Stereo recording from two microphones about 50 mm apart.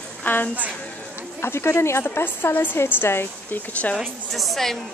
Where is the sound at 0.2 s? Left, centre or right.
Left.